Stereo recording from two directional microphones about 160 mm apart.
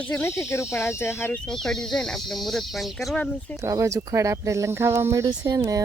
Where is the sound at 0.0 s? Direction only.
10° left (ahead or behind).